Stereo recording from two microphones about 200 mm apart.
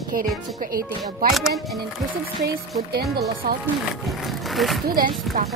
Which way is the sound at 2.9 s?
50° right (ahead or behind).